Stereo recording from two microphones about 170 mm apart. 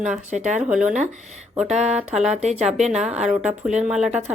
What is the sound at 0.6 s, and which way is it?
A woman's voice, 5° right (ahead or behind).